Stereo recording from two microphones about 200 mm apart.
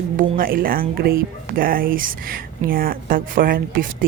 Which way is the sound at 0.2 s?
45° right (ahead or behind).